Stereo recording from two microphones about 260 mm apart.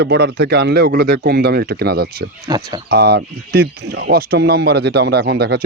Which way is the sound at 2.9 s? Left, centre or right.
Right.